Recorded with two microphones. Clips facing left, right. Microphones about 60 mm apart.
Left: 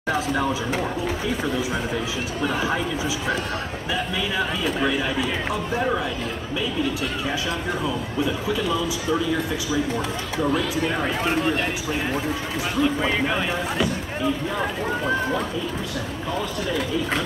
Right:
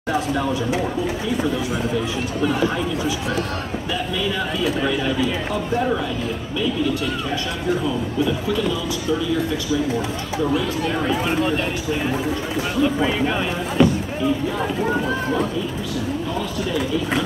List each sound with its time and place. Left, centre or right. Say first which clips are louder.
2.4 s speech: right 3 dB; centre
11.2 s speech: right 2 dB; centre
13.0 s speech: right 2 dB; centre